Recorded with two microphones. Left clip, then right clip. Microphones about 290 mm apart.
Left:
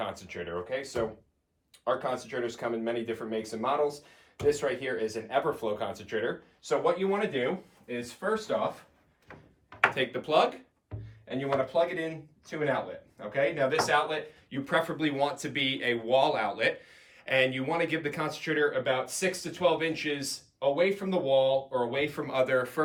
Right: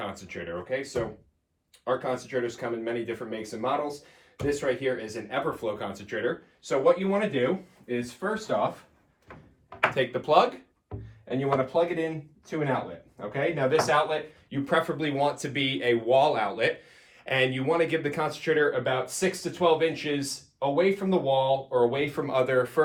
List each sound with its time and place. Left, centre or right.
0.0 s speech: centre
9.9 s speech: centre